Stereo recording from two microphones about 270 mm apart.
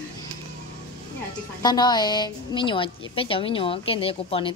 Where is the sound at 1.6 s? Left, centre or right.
Centre.